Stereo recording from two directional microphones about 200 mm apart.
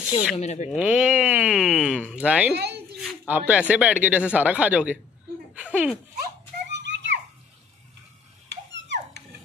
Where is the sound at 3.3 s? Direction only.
5° right (ahead or behind).